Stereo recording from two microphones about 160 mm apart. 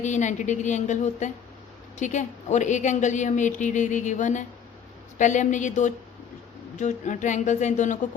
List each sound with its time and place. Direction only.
0.0 s a woman's voice: 50° left (ahead or behind)